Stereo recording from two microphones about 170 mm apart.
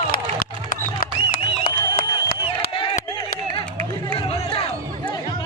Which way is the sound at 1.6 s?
55° left (ahead or behind).